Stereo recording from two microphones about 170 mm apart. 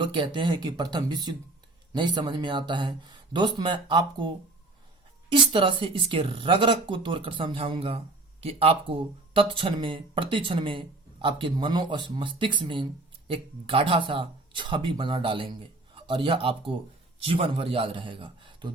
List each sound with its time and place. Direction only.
0.0 s a man's voice: 30° right (ahead or behind)
5.3 s speech: 30° right (ahead or behind)